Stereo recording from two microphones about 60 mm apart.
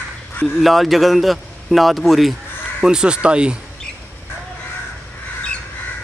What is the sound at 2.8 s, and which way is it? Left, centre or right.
Speech, centre.